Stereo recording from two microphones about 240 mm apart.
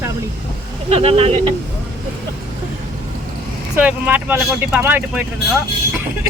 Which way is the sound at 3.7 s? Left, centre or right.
Centre.